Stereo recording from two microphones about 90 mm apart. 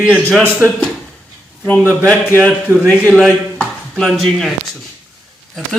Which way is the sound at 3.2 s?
Centre (ahead or behind).